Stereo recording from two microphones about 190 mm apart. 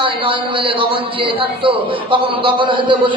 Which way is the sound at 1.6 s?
25° right (ahead or behind).